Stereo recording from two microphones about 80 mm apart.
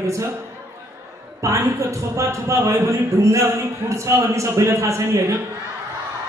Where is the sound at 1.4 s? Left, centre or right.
Right.